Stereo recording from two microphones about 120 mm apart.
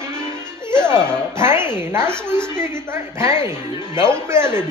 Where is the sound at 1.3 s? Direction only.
20° right (ahead or behind).